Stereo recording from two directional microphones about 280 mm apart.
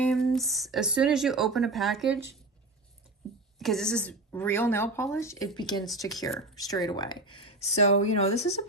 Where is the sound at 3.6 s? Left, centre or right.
Centre; by 8.6 s left.